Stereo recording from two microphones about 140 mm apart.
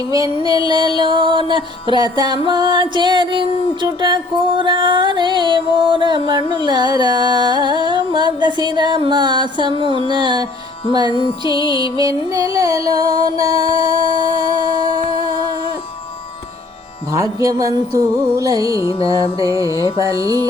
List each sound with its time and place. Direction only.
0.0 s music: 25° right (ahead or behind)
11.1 s music: 35° left (ahead or behind)
11.9 s music: 25° right (ahead or behind)
17.1 s music: 25° right (ahead or behind)